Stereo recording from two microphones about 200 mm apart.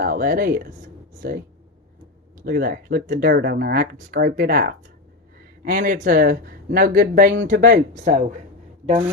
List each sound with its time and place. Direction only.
0.0 s speech: 45° right (ahead or behind)